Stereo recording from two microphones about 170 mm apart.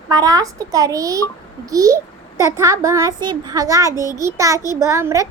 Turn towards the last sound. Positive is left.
turn(degrees=-15)  # may be behind; listen again after turning